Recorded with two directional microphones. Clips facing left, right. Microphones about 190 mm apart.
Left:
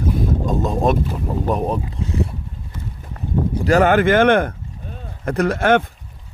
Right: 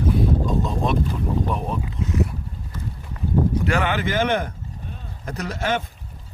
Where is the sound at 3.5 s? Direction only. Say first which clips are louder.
Left 8 dB; 35° left (ahead or behind); by 5.8 s 55° left (ahead or behind).